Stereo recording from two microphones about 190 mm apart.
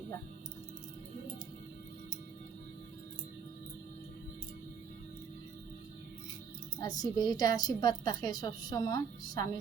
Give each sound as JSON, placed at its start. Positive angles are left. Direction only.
{"t": 6.7, "sound": "a woman's voice", "side_deg": 20}